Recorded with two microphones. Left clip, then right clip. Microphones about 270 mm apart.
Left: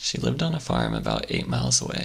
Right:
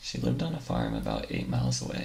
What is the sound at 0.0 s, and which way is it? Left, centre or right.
Speech, left.